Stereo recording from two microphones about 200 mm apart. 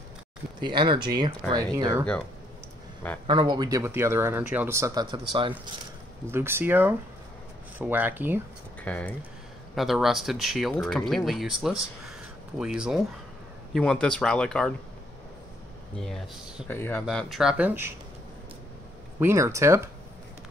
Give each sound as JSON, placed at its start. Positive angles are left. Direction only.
{"t": 0.6, "sound": "speech", "side_deg": -25}
{"t": 3.3, "sound": "speech", "side_deg": -25}
{"t": 8.8, "sound": "speech", "side_deg": 5}
{"t": 12.1, "sound": "a sound", "side_deg": -5}
{"t": 13.7, "sound": "speech", "side_deg": 5}
{"t": 16.0, "sound": "speech", "side_deg": 0}
{"t": 19.1, "sound": "speech", "side_deg": -15}